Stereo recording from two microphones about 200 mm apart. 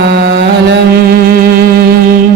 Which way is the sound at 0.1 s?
60° right (ahead or behind).